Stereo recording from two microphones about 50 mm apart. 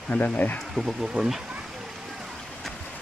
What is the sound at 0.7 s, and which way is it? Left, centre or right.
Speech, centre.